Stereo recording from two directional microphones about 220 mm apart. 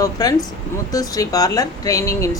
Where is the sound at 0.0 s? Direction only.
15° left (ahead or behind).